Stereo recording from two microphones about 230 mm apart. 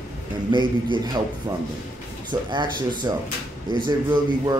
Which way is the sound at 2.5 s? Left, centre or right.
Centre.